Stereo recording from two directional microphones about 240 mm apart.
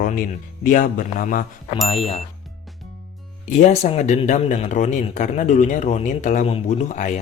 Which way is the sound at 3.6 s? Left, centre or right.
Left.